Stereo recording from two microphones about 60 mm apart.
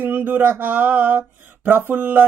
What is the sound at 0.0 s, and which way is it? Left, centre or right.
Speech, right.